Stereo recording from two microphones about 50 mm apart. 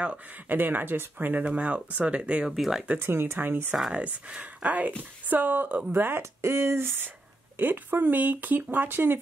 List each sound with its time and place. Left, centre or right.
0.5 s speech: right
2.5 s speech: centre
3.0 s speech: right
3.9 s speech: right
6.4 s speech: right